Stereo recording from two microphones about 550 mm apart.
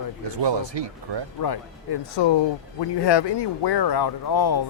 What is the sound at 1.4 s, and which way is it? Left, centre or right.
Speech, left.